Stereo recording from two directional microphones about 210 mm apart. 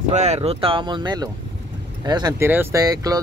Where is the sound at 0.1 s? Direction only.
30° right (ahead or behind).